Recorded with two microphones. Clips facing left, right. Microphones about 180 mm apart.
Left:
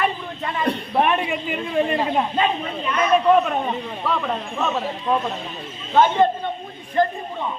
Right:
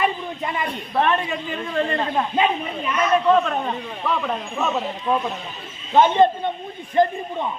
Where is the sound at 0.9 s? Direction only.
15° left (ahead or behind); by 7.1 s 20° right (ahead or behind).